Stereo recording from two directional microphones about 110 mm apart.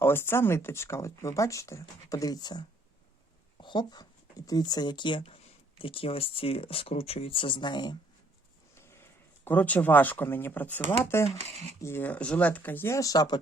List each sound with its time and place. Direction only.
0.0 s speech: 20° left (ahead or behind); by 7.9 s 40° left (ahead or behind)
8.7 s speech: 20° left (ahead or behind); by 13.4 s 40° left (ahead or behind)